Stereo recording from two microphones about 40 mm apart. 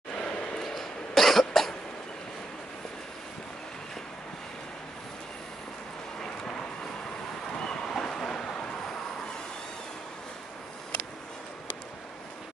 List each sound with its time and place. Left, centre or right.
0.2 s a sound: left
0.6 s cough: centre
7.5 s vehicle: left